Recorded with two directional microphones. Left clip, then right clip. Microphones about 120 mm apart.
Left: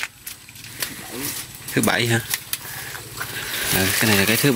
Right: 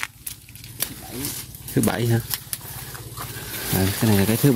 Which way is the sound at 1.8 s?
25° right (ahead or behind).